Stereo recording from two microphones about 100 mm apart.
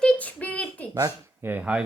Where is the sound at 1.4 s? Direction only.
20° right (ahead or behind).